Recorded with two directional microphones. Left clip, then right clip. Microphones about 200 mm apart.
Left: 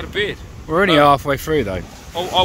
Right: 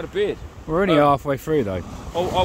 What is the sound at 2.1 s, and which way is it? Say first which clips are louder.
Speech: left 2 dB; 50° right (ahead or behind).